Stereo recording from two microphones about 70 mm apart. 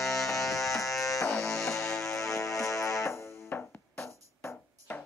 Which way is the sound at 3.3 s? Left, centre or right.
Left.